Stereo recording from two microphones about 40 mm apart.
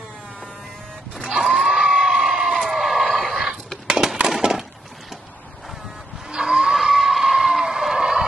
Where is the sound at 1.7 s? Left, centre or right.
Right.